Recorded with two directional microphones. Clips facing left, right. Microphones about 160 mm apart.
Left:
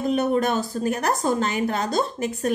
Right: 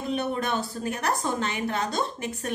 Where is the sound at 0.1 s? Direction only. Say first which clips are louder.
Left 5 dB; 40° left (ahead or behind).